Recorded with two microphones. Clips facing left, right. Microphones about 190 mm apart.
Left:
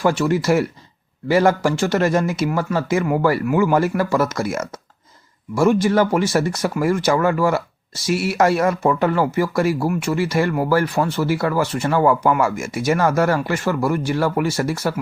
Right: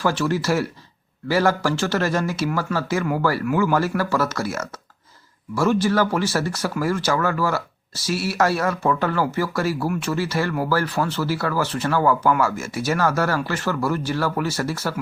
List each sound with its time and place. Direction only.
0.0 s speech: 15° left (ahead or behind)